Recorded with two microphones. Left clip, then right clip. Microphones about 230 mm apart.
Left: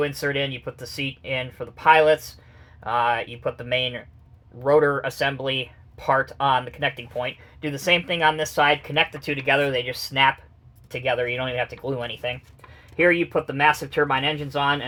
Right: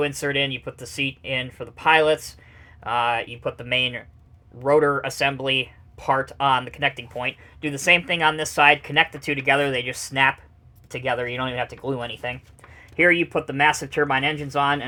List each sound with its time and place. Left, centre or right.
0.0 s speech: right